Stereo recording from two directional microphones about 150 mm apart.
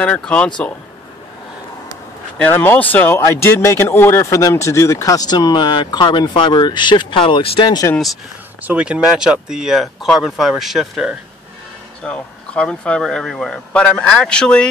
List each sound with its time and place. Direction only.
0.0 s speech: 5° left (ahead or behind)
2.3 s speech: 10° left (ahead or behind); by 7.9 s 30° left (ahead or behind)
8.6 s speech: 10° right (ahead or behind)